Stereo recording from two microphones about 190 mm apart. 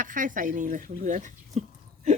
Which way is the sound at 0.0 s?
45° right (ahead or behind).